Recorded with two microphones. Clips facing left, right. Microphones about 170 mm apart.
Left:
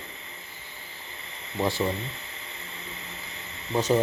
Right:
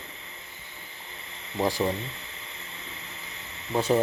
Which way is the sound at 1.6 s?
15° right (ahead or behind).